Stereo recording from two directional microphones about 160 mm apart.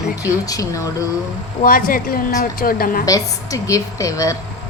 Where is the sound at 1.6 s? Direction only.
65° left (ahead or behind).